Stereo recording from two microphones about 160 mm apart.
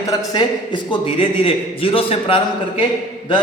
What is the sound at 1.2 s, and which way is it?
A man's voice, 35° left (ahead or behind).